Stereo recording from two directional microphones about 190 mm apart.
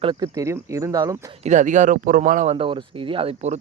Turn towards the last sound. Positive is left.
turn(degrees=-30)  # may be behind; listen again after turning